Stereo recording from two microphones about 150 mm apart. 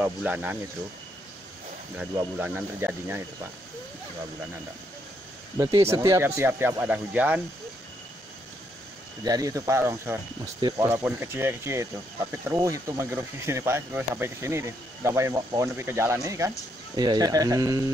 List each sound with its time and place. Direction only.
0.0 s speech: 10° right (ahead or behind)
2.3 s speech: 10° right (ahead or behind)
5.6 s speech: 20° right (ahead or behind)
9.2 s speech: 25° right (ahead or behind)